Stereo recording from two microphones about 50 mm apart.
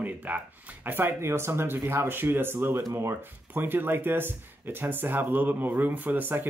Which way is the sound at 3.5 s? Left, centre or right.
Right.